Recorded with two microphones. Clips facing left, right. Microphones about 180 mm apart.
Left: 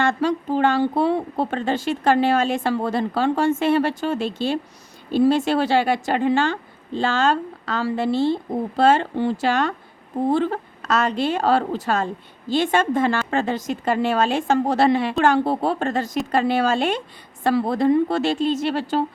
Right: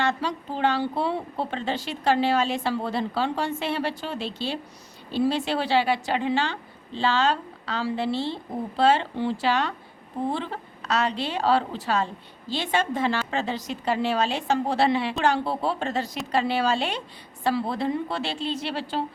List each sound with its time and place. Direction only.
0.0 s a woman's voice: 50° left (ahead or behind)